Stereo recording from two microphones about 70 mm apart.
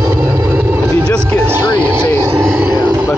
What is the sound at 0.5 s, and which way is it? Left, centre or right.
Vehicle, right.